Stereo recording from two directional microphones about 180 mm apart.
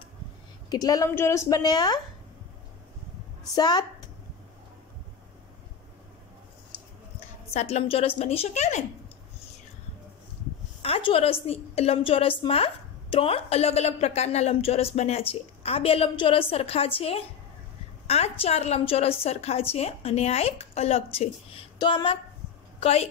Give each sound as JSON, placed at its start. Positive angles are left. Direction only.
{"t": 0.7, "sound": "a woman's voice", "side_deg": 20}
{"t": 3.5, "sound": "a woman's voice", "side_deg": 25}
{"t": 7.5, "sound": "a woman's voice", "side_deg": 35}
{"t": 10.8, "sound": "a woman's voice", "side_deg": 30}